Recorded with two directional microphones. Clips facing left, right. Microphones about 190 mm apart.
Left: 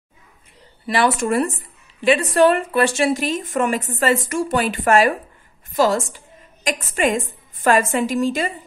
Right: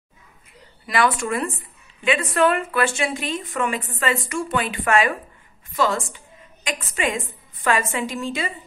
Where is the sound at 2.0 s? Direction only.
35° left (ahead or behind).